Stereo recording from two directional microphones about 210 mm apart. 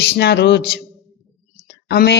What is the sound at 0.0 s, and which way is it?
Speech, 50° left (ahead or behind).